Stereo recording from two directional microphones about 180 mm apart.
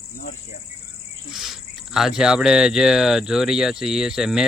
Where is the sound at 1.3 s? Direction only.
Centre (ahead or behind).